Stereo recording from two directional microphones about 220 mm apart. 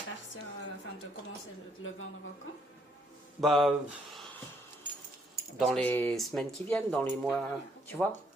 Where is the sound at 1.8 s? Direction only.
65° left (ahead or behind).